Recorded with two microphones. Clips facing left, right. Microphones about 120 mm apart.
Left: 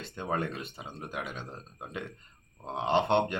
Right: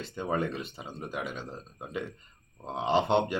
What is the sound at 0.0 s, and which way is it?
Speech, centre (ahead or behind).